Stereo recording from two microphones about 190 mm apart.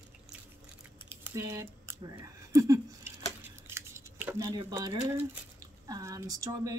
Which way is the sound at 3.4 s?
15° right (ahead or behind).